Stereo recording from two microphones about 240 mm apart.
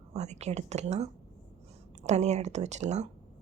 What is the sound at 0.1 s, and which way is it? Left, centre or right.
Speech, right.